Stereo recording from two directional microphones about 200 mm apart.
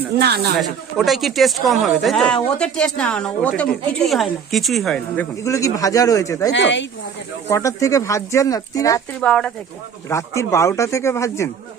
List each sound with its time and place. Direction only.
0.2 s speech: 55° right (ahead or behind)
0.5 s speech: centre (ahead or behind); by 6.5 s 15° left (ahead or behind)
6.5 s speech: 65° left (ahead or behind)
7.4 s speech: 15° left (ahead or behind)
9.2 s speech: 5° left (ahead or behind)